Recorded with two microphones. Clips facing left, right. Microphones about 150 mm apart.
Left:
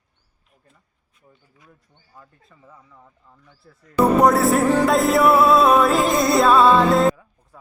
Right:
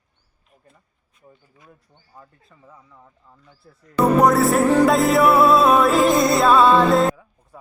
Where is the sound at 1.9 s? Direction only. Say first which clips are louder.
Right 3 dB; 40° right (ahead or behind).